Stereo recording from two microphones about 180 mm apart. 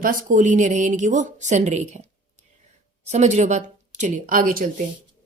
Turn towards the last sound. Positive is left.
turn(degrees=-50)  # may be behind; listen again after turning